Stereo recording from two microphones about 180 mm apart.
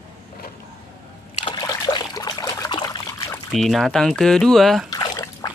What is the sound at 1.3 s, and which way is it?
Trickle, 25° left (ahead or behind).